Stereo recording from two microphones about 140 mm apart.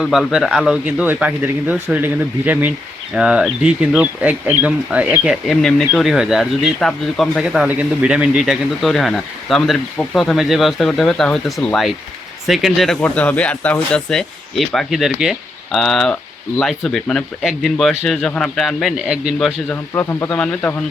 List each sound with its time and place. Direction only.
0.0 s speech: 5° right (ahead or behind)
19.7 s speech: 15° left (ahead or behind)